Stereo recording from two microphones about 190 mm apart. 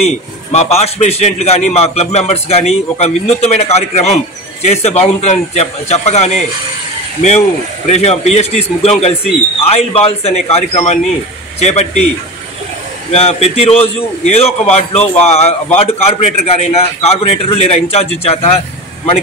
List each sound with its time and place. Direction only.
0.0 s a man's voice: 35° left (ahead or behind)
13.1 s a man's voice: 30° left (ahead or behind)